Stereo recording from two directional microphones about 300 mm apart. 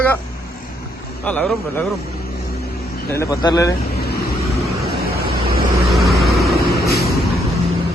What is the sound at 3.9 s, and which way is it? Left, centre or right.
Vehicle, left.